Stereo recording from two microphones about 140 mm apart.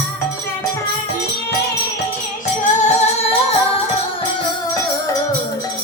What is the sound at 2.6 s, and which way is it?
Music, 55° left (ahead or behind).